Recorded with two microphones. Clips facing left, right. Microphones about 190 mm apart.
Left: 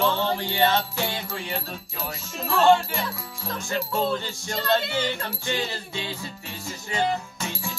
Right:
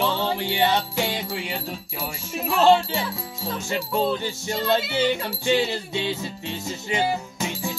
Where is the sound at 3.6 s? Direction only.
15° right (ahead or behind).